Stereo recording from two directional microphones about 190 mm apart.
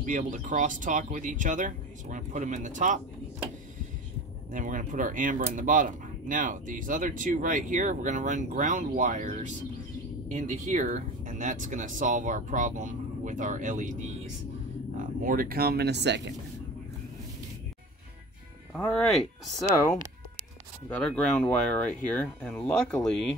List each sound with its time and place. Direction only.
0.0 s speech: 40° right (ahead or behind)
4.5 s speech: 45° right (ahead or behind)
15.0 s speech: 45° right (ahead or behind); by 16.3 s 65° right (ahead or behind)
18.7 s speech: 5° left (ahead or behind)
19.7 s speech: 15° left (ahead or behind)